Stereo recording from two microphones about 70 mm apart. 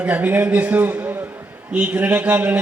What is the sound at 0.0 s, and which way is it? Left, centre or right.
A man's voice, right.